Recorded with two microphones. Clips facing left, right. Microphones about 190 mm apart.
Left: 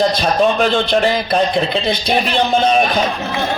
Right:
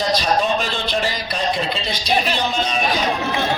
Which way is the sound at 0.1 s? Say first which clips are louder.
Left 4 dB; 55° left (ahead or behind).